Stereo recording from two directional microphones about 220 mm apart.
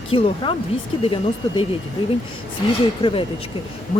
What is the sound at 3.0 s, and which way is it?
Speech, 25° left (ahead or behind).